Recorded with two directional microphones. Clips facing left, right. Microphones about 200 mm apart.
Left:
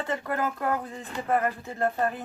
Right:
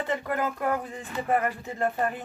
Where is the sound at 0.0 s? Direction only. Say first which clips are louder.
Right 1 dB; 15° right (ahead or behind).